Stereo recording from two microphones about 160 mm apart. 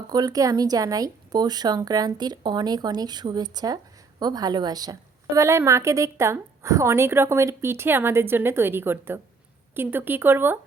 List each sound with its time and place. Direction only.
0.1 s a woman's voice: 25° right (ahead or behind)